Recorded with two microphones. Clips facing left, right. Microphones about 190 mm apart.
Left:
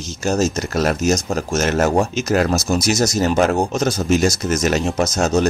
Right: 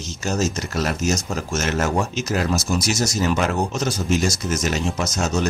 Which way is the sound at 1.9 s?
35° left (ahead or behind).